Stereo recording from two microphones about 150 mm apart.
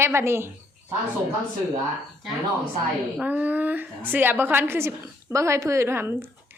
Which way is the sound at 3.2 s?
10° right (ahead or behind).